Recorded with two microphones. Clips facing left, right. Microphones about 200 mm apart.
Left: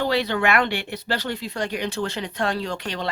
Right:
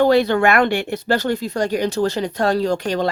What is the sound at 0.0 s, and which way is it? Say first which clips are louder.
Speech: right 8 dB; 50° right (ahead or behind).